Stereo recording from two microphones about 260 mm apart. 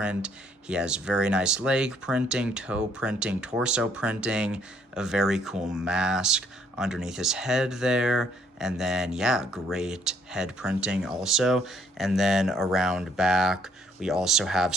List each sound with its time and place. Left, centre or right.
0.0 s speech: centre